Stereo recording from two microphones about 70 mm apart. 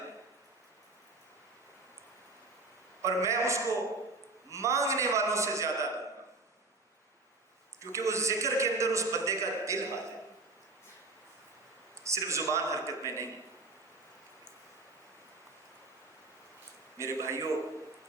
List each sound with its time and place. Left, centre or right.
3.0 s a man's voice: right
7.9 s a man's voice: right
12.0 s a man's voice: right
17.0 s a man's voice: right